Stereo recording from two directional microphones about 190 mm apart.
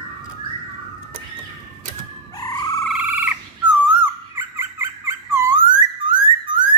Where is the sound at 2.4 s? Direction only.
20° left (ahead or behind).